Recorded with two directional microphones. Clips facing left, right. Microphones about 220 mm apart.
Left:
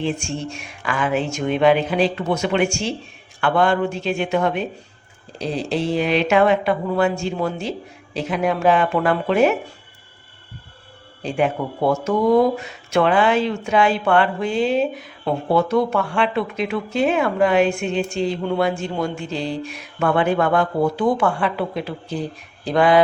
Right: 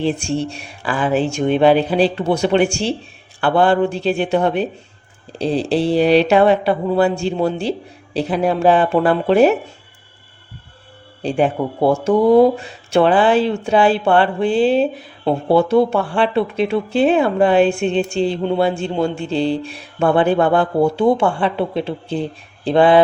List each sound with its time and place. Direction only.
0.0 s speech: 35° right (ahead or behind)
11.2 s speech: 35° right (ahead or behind)